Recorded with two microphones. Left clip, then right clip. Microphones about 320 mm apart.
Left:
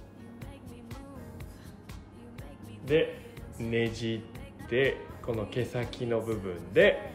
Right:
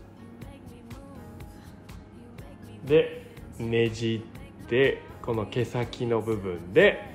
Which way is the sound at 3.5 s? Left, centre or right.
Centre.